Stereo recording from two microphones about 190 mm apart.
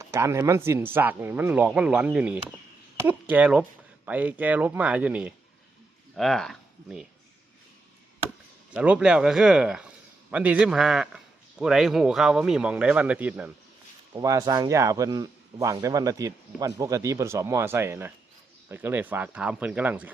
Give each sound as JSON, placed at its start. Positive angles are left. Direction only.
{"t": 0.0, "sound": "a man's voice", "side_deg": -15}
{"t": 8.7, "sound": "a man's voice", "side_deg": -5}